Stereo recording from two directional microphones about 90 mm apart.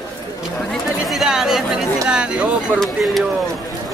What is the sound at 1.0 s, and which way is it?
Chatter, 5° right (ahead or behind).